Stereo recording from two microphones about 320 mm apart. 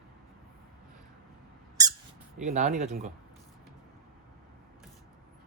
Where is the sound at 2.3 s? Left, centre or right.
Right.